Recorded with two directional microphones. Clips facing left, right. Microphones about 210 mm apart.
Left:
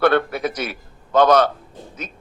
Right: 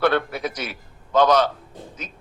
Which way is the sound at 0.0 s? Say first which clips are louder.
Left 3 dB; 55° left (ahead or behind).